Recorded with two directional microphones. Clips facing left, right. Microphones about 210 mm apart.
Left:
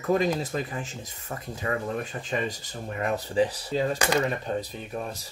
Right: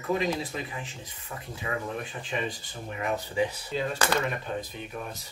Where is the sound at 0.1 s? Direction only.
45° left (ahead or behind).